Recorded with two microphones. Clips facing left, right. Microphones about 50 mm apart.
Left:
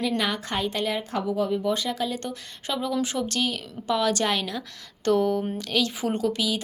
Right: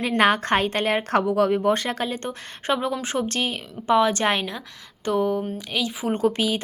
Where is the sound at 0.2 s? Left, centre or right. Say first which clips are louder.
Right 8 dB; right.